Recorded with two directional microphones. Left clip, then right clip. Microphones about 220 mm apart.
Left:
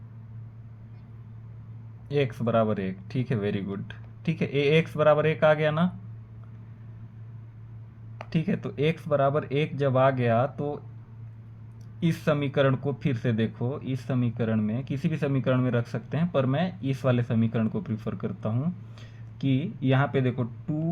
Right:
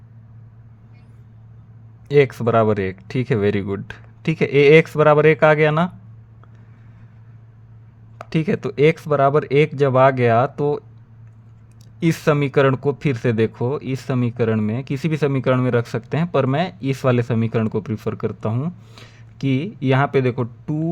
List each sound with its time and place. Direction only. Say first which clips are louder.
2.0 s speech: right 11 dB; 50° right (ahead or behind)
8.3 s speech: right 10 dB; 50° right (ahead or behind)
11.9 s speech: right 9 dB; 50° right (ahead or behind)